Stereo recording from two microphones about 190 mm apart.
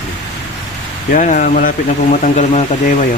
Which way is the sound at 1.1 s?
45° left (ahead or behind).